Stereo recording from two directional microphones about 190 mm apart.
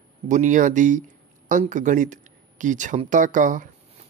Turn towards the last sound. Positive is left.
turn(degrees=-45)  # may be behind; listen again after turning